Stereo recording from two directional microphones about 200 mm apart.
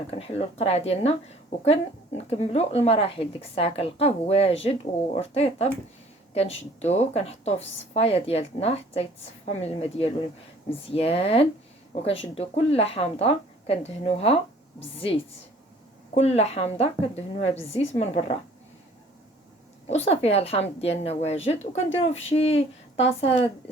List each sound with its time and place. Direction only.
0.1 s speech: 30° left (ahead or behind)
12.7 s speech: 30° left (ahead or behind)
19.9 s speech: 30° left (ahead or behind)